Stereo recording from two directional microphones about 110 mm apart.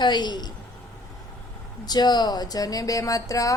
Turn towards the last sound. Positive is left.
turn(degrees=30)  # may be behind; listen again after turning